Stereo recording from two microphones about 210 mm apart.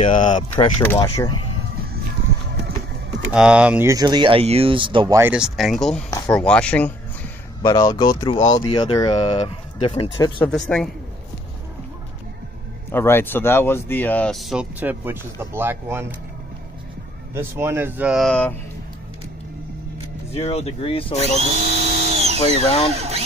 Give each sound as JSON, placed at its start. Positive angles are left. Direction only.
{"t": 0.4, "sound": "speech", "side_deg": 20}
{"t": 3.3, "sound": "speech", "side_deg": -5}
{"t": 7.6, "sound": "speech", "side_deg": 20}
{"t": 8.4, "sound": "speech", "side_deg": 30}
{"t": 10.4, "sound": "speech", "side_deg": 5}
{"t": 12.9, "sound": "speech", "side_deg": 10}
{"t": 17.3, "sound": "speech", "side_deg": -10}
{"t": 20.3, "sound": "speech", "side_deg": 30}
{"t": 21.4, "sound": "drill", "side_deg": -30}
{"t": 22.6, "sound": "speech", "side_deg": 30}
{"t": 22.9, "sound": "speech", "side_deg": -30}